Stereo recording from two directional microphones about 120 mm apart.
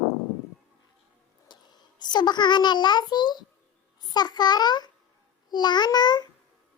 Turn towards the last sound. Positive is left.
turn(degrees=35)  # may be behind; listen again after turning